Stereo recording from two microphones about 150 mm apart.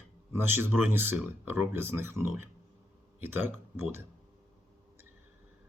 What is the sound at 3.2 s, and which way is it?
Speech, 15° right (ahead or behind).